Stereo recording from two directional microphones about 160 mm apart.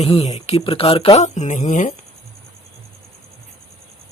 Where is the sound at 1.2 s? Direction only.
50° left (ahead or behind).